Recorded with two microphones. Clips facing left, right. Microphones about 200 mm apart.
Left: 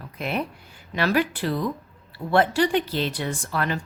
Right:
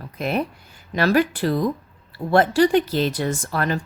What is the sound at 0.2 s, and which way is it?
A woman's voice, 40° right (ahead or behind).